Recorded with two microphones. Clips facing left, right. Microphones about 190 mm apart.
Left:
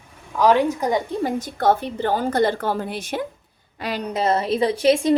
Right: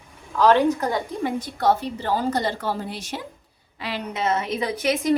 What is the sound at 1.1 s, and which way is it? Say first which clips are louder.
A woman's voice: left 3 dB; 45° left (ahead or behind).